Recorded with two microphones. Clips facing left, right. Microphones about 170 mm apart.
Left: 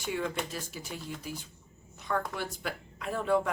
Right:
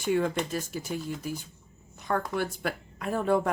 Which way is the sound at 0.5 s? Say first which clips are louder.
Right 7 dB; 45° right (ahead or behind).